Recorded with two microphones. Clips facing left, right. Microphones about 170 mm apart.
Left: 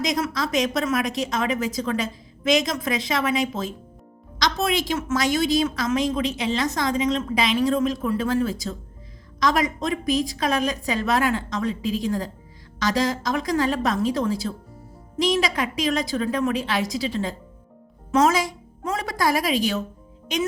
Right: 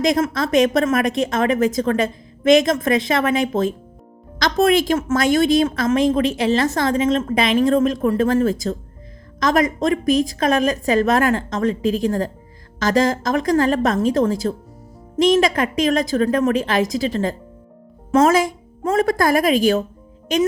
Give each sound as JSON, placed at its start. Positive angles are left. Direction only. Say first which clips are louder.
{"t": 0.0, "sound": "a woman's voice", "louder": "right 6 dB", "side_deg": -55}